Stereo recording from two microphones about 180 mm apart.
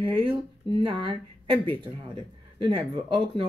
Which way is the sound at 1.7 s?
25° right (ahead or behind).